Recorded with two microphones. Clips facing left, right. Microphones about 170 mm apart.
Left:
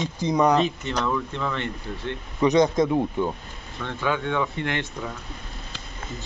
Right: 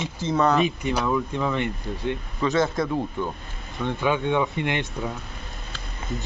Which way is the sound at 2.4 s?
20° left (ahead or behind).